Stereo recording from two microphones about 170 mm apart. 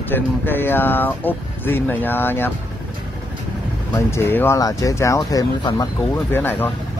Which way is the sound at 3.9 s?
15° left (ahead or behind).